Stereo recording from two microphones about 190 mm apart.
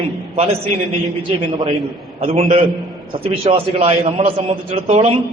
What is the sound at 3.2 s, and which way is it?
A man's voice, 30° right (ahead or behind).